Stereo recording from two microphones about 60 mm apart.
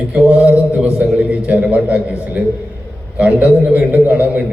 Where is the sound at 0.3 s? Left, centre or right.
Right.